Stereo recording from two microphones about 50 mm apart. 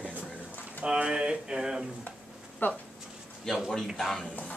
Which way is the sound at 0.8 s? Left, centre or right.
Centre.